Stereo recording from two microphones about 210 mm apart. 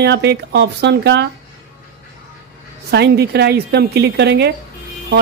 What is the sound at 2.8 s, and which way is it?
A woman's voice, 50° right (ahead or behind).